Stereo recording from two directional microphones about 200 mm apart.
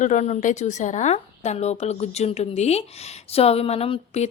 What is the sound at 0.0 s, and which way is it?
A woman's voice, 35° left (ahead or behind).